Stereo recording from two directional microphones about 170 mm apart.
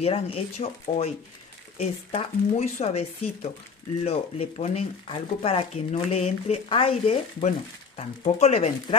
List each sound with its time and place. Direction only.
0.0 s speech: 35° left (ahead or behind)